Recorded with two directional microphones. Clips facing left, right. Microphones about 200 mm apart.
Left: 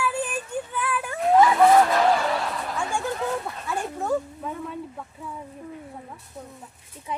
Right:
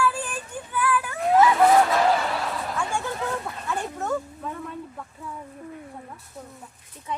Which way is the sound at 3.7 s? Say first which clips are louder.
Left 2 dB; 10° left (ahead or behind).